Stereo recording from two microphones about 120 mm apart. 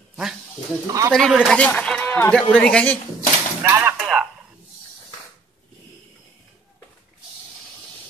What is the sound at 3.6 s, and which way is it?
Speech, 20° right (ahead or behind).